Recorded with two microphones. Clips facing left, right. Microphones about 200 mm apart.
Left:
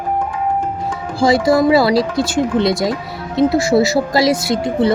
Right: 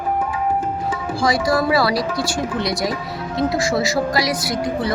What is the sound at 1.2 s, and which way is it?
Speech, 25° left (ahead or behind).